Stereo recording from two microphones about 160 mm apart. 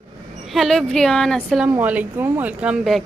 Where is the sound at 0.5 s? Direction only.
Centre (ahead or behind).